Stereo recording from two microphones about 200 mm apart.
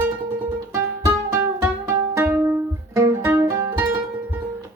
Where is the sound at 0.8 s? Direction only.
10° right (ahead or behind).